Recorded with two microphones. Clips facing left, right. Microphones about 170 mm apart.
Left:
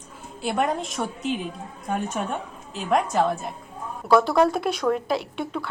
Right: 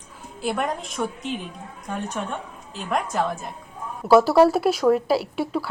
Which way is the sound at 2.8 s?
Centre (ahead or behind).